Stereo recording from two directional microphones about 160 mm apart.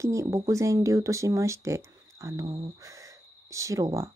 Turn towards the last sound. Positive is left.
turn(degrees=-20)  # may be behind; listen again after turning